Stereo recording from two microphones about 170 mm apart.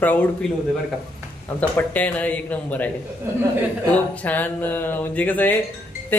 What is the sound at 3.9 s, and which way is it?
Speech, 10° left (ahead or behind).